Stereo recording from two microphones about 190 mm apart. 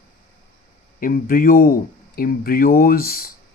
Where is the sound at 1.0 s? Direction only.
45° left (ahead or behind).